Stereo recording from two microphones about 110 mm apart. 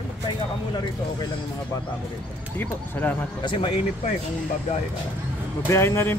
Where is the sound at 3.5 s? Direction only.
55° left (ahead or behind).